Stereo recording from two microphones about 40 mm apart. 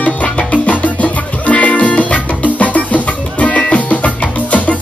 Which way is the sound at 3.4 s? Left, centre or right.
Left.